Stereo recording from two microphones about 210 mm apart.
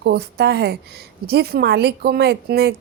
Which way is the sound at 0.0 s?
50° right (ahead or behind).